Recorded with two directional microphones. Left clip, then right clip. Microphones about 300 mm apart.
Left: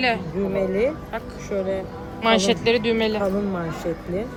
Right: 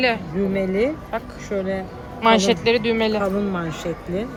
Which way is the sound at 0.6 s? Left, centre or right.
Right.